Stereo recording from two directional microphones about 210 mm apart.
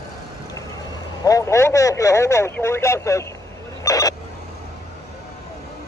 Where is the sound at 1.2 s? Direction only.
15° left (ahead or behind).